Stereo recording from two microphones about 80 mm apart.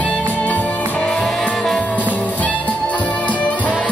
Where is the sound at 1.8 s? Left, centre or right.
Centre.